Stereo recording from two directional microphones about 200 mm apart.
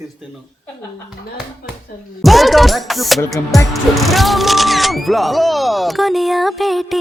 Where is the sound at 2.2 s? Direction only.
Centre (ahead or behind).